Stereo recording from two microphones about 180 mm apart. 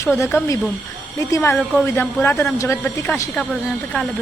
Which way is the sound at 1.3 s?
15° left (ahead or behind).